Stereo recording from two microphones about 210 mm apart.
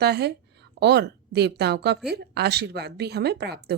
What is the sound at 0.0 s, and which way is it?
A woman's voice, 50° right (ahead or behind).